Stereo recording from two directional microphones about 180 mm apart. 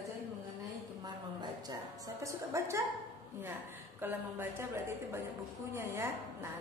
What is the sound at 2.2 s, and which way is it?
Speech, 15° right (ahead or behind).